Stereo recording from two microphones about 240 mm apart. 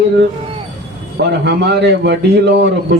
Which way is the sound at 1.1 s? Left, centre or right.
Right.